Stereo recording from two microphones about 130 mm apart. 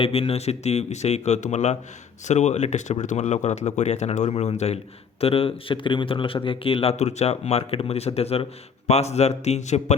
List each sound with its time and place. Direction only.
0.0 s speech: 45° left (ahead or behind)